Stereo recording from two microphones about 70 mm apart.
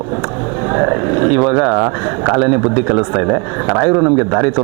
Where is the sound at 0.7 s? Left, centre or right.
Right.